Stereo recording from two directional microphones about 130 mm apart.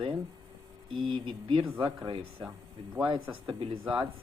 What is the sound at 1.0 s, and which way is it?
Speech, 40° right (ahead or behind).